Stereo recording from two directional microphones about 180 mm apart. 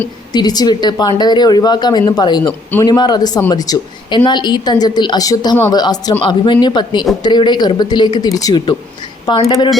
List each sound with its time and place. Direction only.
0.3 s speech: 20° left (ahead or behind)